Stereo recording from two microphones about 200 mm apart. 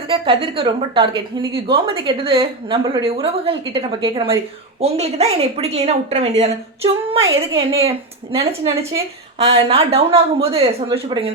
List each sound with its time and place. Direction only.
0.1 s a woman's voice: 25° right (ahead or behind)
7.2 s a woman's voice: 15° right (ahead or behind)
7.9 s a woman's voice: 30° right (ahead or behind)
9.6 s a woman's voice: 30° right (ahead or behind)